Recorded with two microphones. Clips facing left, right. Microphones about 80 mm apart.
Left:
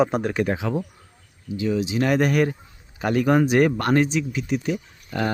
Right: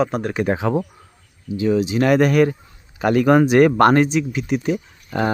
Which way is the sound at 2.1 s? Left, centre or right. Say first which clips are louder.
Right 5 dB; right.